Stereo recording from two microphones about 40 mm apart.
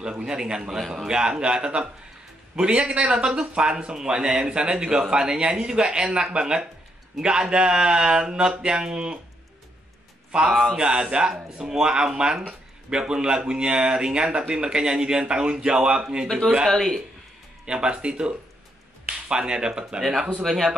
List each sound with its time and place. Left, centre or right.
0.0 s speech: right
0.7 s speech: centre
1.0 s speech: centre
3.1 s speech: centre
10.5 s speech: centre
10.8 s speech: right
16.6 s speech: centre
17.6 s speech: right
20.4 s speech: centre